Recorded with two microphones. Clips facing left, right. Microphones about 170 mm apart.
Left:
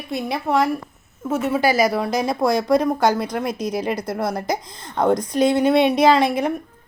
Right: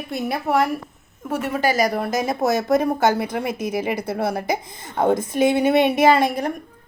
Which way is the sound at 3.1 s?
55° right (ahead or behind).